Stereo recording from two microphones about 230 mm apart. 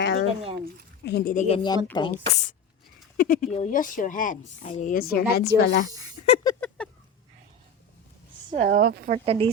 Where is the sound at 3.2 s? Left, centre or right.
Left.